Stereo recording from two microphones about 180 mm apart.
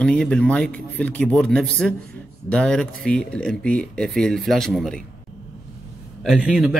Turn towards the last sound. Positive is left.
turn(degrees=-5)  # may be behind; listen again after turning